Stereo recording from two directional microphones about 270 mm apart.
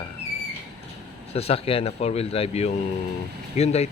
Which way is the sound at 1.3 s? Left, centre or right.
Left.